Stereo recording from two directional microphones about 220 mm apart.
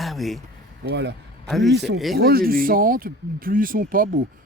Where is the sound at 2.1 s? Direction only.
45° right (ahead or behind).